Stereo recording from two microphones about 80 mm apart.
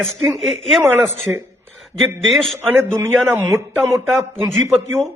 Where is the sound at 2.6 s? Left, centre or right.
Right.